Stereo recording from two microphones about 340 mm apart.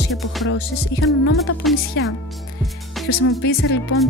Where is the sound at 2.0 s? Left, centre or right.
Left.